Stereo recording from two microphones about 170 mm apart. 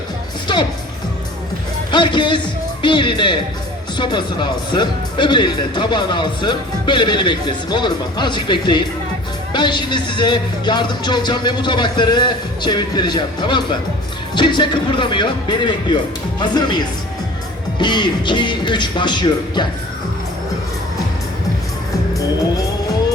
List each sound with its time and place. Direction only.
1.9 s a man's voice: 25° left (ahead or behind)